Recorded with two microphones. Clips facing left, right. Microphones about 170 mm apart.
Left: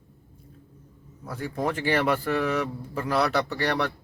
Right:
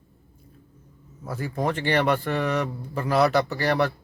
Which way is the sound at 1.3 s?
5° right (ahead or behind).